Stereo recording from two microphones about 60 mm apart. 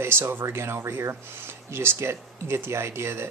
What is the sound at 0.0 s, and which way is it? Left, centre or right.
Speech, right.